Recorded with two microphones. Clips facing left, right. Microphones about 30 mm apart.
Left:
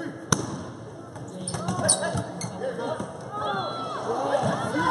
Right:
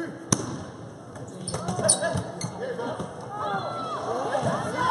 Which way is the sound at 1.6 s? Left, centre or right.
Centre.